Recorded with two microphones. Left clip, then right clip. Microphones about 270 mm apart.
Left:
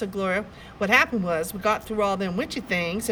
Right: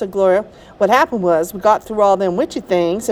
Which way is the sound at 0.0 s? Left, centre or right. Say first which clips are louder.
Right 12 dB; centre.